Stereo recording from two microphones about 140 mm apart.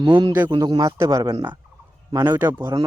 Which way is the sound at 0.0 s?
35° right (ahead or behind).